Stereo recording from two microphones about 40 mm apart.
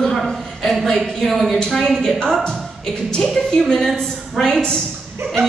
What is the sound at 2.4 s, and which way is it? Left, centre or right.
Speech, left.